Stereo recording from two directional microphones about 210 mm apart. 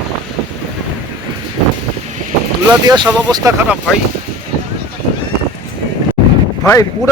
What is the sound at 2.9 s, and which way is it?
Speech, 20° right (ahead or behind).